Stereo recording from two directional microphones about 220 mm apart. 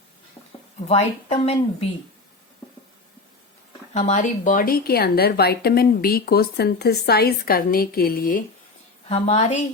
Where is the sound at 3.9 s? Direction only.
30° left (ahead or behind).